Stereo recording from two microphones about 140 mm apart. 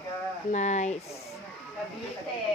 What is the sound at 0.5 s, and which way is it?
Speech, 55° left (ahead or behind).